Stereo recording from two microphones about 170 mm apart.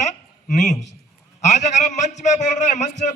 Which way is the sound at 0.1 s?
45° left (ahead or behind).